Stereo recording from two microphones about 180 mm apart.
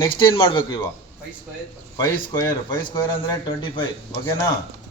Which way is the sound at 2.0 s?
20° left (ahead or behind).